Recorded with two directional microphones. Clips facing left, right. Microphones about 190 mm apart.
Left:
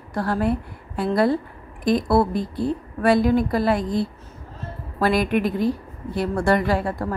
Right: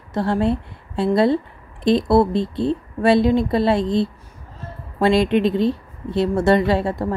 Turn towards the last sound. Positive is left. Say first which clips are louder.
# right 3 dB
turn(degrees=-25)  # may be behind; listen again after turning